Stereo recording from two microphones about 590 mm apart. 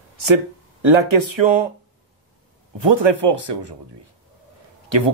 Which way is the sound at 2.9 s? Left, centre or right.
Right.